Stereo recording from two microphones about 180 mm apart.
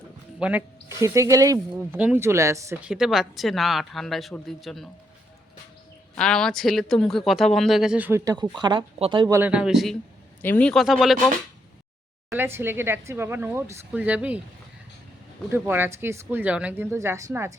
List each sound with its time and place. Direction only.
0.3 s speech: 10° right (ahead or behind)
2.9 s speech: centre (ahead or behind)
6.1 s speech: 5° left (ahead or behind); by 9.4 s 25° right (ahead or behind)
9.4 s speech: 5° right (ahead or behind)
12.3 s speech: 15° right (ahead or behind)
15.4 s speech: 10° right (ahead or behind)